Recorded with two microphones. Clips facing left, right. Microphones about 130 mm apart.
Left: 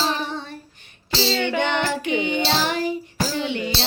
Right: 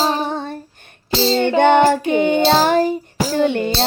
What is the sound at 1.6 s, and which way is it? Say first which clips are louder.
Music: right 11 dB; 50° right (ahead or behind).